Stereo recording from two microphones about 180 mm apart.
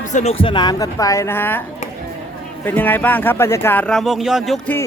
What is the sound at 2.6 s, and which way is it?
Speech, 10° left (ahead or behind).